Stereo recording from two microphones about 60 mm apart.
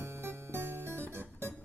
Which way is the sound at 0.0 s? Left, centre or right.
Right.